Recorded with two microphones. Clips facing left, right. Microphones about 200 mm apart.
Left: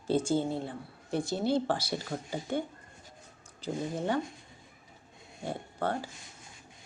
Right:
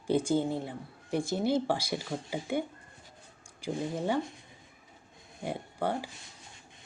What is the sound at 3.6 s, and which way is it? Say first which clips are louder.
Speech: right 1 dB; 10° right (ahead or behind).